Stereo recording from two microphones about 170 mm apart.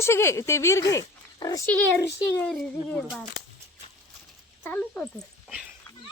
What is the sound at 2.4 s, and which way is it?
Speech, centre (ahead or behind).